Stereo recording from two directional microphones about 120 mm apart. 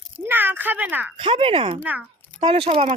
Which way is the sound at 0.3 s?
15° right (ahead or behind).